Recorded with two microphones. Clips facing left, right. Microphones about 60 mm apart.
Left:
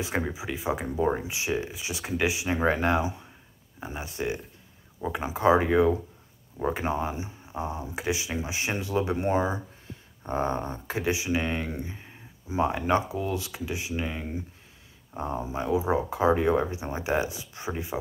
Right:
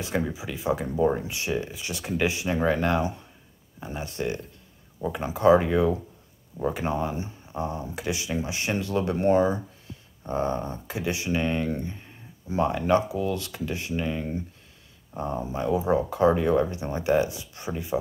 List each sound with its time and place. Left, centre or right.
0.0 s speech: left
11.1 s speech: centre